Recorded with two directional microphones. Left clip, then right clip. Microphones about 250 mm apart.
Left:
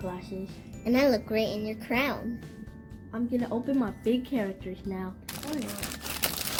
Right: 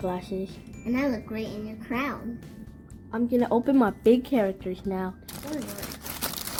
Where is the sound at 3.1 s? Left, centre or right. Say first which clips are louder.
Right 7 dB; right.